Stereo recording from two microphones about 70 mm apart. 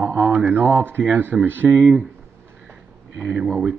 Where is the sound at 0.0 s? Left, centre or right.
Right.